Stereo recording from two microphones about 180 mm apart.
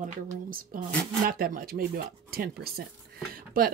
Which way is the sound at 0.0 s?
50° right (ahead or behind).